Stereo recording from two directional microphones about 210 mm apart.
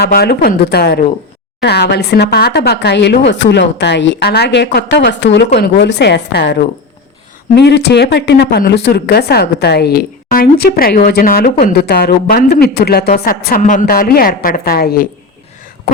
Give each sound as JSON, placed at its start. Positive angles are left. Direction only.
{"t": 0.0, "sound": "speech", "side_deg": 50}